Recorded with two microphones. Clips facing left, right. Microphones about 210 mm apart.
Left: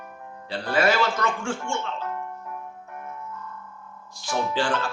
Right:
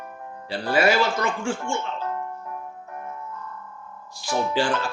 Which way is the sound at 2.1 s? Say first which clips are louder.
Right 2 dB; 35° right (ahead or behind).